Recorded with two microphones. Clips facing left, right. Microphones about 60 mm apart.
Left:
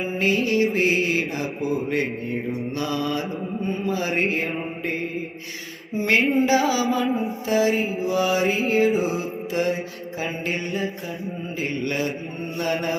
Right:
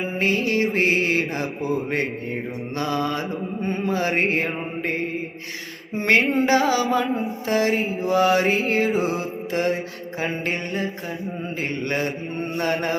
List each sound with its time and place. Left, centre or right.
0.2 s mantra: right
6.0 s mantra: right
7.1 s music: centre
7.4 s mantra: right
7.8 s music: centre
8.0 s mantra: right
9.0 s music: right
10.2 s mantra: right
11.9 s mantra: right